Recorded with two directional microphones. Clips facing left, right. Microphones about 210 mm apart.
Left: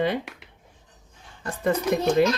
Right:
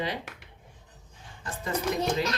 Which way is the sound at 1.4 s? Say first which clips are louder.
Left 6 dB; 55° left (ahead or behind).